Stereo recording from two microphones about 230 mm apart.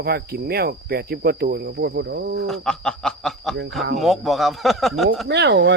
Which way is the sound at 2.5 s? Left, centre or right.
Centre.